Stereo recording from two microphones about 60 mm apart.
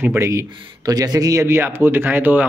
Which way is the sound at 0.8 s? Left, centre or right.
Right.